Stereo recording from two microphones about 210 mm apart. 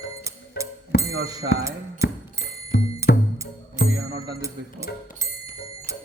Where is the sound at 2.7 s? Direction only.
50° left (ahead or behind).